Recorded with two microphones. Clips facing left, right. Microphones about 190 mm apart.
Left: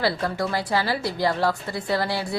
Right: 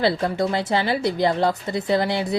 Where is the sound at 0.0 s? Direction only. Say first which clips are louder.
Right 4 dB; 25° right (ahead or behind).